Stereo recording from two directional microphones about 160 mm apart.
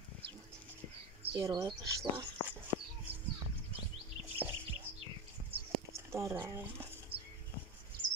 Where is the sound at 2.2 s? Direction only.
15° right (ahead or behind).